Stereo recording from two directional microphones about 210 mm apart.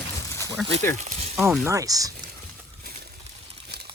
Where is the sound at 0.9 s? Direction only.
30° right (ahead or behind).